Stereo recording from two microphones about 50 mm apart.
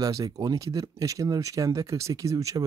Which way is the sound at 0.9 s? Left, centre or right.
Right.